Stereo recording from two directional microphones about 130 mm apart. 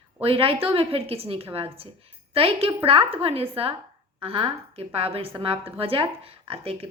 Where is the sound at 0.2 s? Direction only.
45° right (ahead or behind).